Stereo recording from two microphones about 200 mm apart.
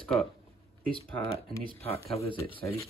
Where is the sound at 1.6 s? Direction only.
30° left (ahead or behind).